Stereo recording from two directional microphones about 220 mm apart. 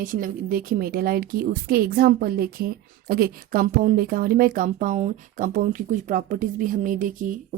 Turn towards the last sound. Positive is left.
turn(degrees=-35)  # may be behind; listen again after turning